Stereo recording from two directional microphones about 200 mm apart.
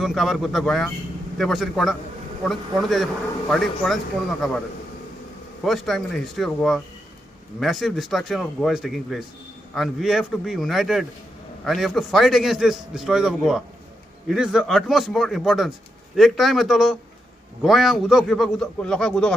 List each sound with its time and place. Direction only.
0.0 s a man's voice: centre (ahead or behind)
5.6 s a man's voice: centre (ahead or behind)